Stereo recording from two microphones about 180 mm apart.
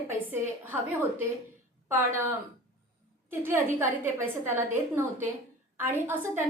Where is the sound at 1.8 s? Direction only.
15° right (ahead or behind).